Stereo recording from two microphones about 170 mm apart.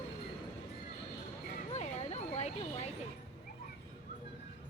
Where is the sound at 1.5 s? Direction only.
40° left (ahead or behind).